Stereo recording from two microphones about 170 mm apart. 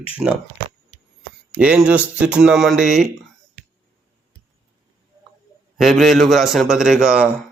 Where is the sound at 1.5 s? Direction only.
5° right (ahead or behind).